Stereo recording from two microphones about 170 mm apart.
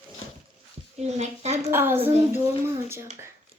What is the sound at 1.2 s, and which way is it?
Speech, 40° right (ahead or behind).